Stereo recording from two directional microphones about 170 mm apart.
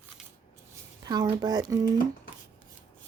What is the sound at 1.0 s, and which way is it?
Speech, 20° right (ahead or behind).